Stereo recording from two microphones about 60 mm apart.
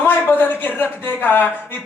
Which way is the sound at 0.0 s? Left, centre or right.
Left.